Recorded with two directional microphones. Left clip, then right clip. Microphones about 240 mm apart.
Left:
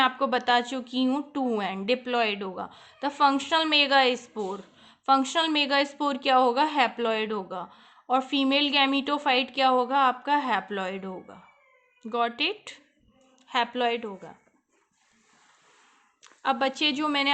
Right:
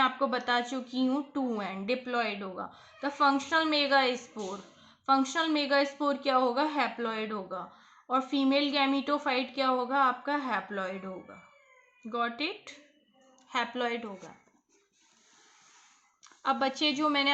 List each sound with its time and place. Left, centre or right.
0.0 s a woman's voice: left
16.2 s a woman's voice: left